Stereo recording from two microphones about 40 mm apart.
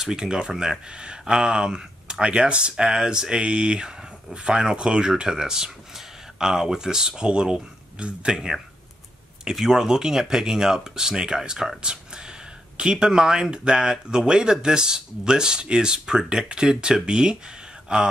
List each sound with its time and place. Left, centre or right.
0.0 s speech: centre
12.7 s speech: centre